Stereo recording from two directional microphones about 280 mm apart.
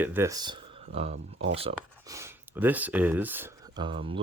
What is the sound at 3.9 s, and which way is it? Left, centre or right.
Speech, centre.